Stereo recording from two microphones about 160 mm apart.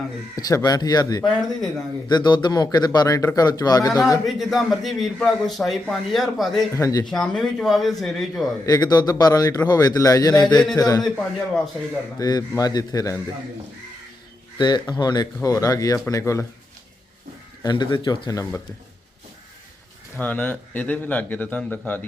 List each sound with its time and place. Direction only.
0.3 s a man's voice: 25° left (ahead or behind)
1.3 s a man's voice: centre (ahead or behind)
2.0 s a man's voice: 25° left (ahead or behind)
4.3 s a man's voice: centre (ahead or behind)
6.7 s a man's voice: 20° left (ahead or behind)
7.1 s a man's voice: 5° left (ahead or behind)
8.6 s a man's voice: 25° left (ahead or behind)
12.2 s a man's voice: 25° left (ahead or behind)
14.6 s a man's voice: 25° left (ahead or behind)
17.6 s a man's voice: 30° left (ahead or behind)
20.1 s speech: 10° left (ahead or behind)